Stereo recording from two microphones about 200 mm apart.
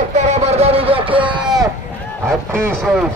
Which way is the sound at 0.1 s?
35° right (ahead or behind).